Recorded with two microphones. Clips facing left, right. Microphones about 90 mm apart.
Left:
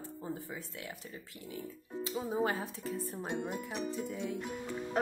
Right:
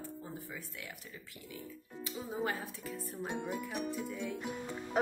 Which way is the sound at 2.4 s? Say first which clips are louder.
Left 4 dB; 25° left (ahead or behind).